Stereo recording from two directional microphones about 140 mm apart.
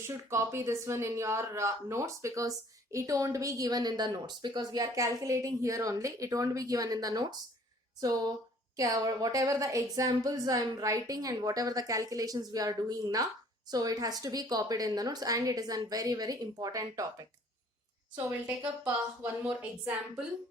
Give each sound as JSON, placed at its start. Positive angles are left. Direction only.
{"t": 0.1, "sound": "speech", "side_deg": -20}
{"t": 8.7, "sound": "speech", "side_deg": -25}